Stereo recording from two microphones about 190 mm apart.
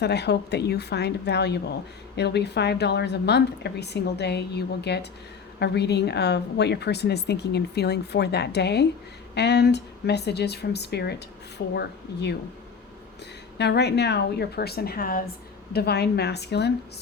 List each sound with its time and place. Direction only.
0.0 s a woman's voice: 60° left (ahead or behind)
13.6 s a woman's voice: 60° left (ahead or behind)